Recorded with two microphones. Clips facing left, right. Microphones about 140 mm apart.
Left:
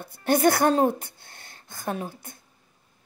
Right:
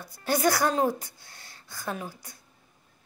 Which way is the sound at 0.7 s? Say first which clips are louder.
Left 4 dB; 30° left (ahead or behind).